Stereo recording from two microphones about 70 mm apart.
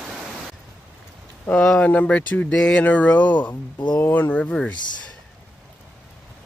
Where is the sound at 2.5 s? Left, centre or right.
Centre.